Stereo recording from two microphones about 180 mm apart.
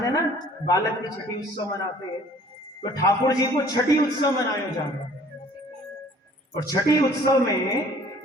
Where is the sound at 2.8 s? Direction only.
20° left (ahead or behind).